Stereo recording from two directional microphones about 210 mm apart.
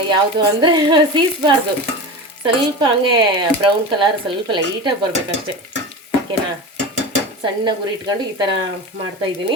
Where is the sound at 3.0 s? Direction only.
20° right (ahead or behind).